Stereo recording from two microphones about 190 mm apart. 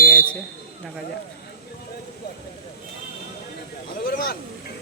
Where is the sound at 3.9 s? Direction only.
55° left (ahead or behind).